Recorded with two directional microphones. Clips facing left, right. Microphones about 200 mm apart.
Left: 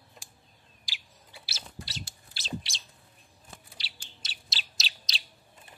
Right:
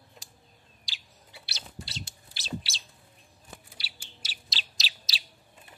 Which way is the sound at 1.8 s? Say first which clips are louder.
Right 1 dB; 25° right (ahead or behind).